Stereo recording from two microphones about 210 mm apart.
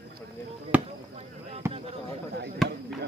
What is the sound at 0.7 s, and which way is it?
Basketball bounce, 5° right (ahead or behind).